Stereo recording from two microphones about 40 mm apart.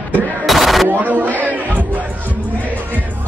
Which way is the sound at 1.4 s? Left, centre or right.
Right.